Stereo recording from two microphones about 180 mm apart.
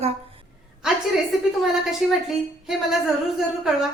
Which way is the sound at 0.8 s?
Centre (ahead or behind).